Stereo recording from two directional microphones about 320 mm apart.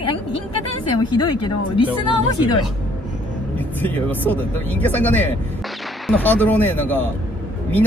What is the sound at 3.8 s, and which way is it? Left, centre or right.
Speech, centre.